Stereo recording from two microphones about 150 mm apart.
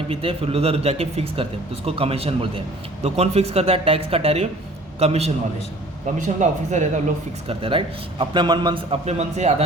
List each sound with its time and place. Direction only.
0.1 s speech: 40° right (ahead or behind)
7.4 s speech: 35° right (ahead or behind)